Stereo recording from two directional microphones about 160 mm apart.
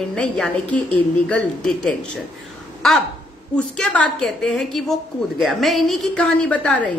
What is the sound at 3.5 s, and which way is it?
A woman's voice, 5° left (ahead or behind).